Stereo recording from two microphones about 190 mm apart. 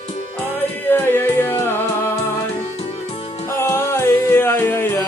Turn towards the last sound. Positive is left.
turn(degrees=10)  # may be behind; listen again after turning